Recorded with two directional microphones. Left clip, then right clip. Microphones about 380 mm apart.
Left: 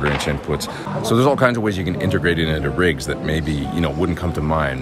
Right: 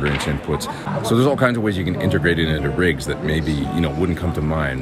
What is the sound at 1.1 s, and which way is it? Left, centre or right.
Speech, centre.